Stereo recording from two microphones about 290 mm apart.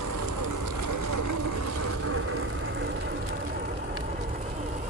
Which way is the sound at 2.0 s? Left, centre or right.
Right.